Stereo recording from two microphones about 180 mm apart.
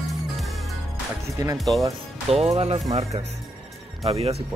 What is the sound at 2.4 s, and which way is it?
Speech, 35° right (ahead or behind).